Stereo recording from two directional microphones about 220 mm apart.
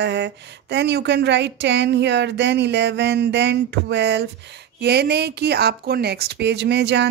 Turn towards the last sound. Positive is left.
turn(degrees=-50)  # may be behind; listen again after turning